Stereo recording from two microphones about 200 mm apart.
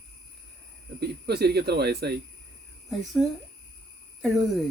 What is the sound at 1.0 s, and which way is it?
Speech, 55° right (ahead or behind).